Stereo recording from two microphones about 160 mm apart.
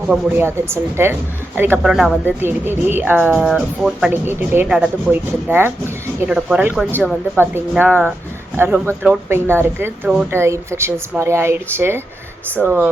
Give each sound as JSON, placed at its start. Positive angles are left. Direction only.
{"t": 0.1, "sound": "speech", "side_deg": -15}